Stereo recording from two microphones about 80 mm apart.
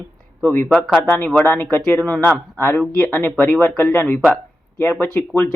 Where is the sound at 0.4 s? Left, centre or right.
Left.